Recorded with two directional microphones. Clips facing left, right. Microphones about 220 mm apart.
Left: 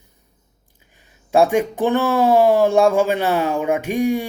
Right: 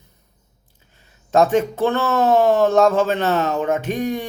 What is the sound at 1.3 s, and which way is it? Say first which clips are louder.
Speech: even; 10° left (ahead or behind).